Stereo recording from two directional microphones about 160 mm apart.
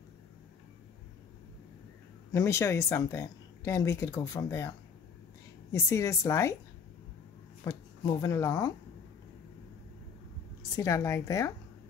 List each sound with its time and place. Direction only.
2.3 s speech: 20° left (ahead or behind)
7.6 s speech: 20° left (ahead or behind)
10.6 s speech: 20° left (ahead or behind)